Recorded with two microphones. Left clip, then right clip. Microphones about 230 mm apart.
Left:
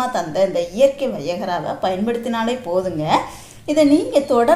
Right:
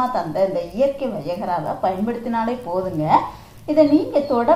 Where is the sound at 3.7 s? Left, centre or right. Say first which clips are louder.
Left 1 dB; left.